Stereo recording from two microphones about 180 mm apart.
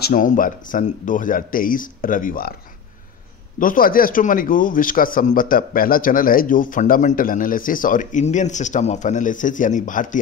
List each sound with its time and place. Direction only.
0.0 s speech: 50° left (ahead or behind)
3.5 s speech: 50° left (ahead or behind)